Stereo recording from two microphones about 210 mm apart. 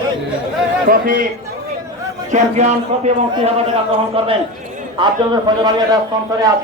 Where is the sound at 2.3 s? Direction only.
35° right (ahead or behind).